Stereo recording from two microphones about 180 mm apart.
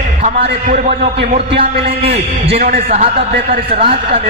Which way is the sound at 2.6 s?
50° right (ahead or behind).